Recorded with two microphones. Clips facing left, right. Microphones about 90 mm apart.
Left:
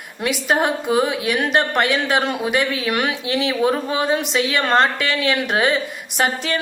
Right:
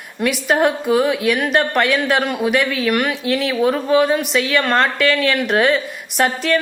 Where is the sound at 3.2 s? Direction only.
55° right (ahead or behind).